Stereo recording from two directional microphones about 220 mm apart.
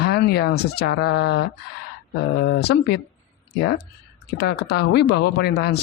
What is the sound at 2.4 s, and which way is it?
Speech, 50° left (ahead or behind).